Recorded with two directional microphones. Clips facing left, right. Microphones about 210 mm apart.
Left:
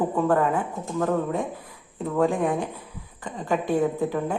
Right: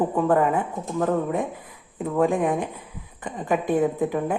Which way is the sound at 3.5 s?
10° right (ahead or behind).